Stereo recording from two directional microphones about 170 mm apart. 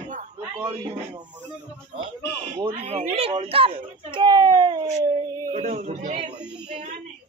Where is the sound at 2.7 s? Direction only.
40° right (ahead or behind); by 5.5 s 25° right (ahead or behind).